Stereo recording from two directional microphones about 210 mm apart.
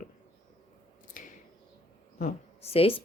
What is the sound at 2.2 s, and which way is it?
Speech, 30° left (ahead or behind).